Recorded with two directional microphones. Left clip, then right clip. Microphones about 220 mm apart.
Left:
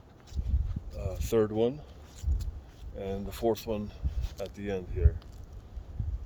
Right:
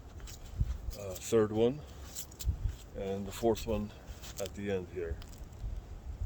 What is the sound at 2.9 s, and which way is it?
Speech, 30° left (ahead or behind).